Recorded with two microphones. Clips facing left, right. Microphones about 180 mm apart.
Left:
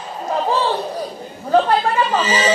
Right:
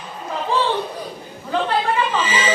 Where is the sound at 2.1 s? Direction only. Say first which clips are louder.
Left 3 dB; 40° left (ahead or behind).